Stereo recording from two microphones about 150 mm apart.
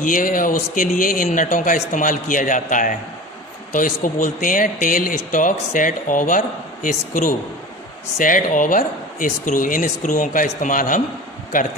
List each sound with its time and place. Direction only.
0.0 s a man's voice: 65° left (ahead or behind)